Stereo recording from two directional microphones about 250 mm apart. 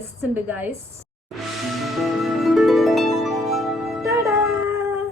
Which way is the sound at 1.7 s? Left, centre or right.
Centre.